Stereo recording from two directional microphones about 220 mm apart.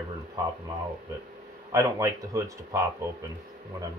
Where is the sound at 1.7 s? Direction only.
15° right (ahead or behind).